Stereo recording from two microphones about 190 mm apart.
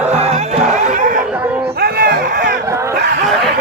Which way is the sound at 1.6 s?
55° right (ahead or behind).